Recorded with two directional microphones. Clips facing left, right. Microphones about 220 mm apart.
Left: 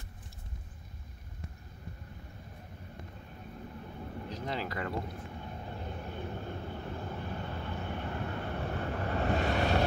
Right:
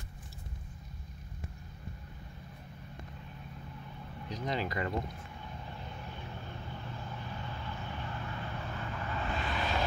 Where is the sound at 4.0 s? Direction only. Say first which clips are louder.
Left 2 dB; 40° left (ahead or behind).